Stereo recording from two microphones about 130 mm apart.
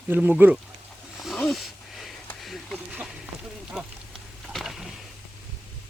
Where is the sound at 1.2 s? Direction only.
Centre (ahead or behind).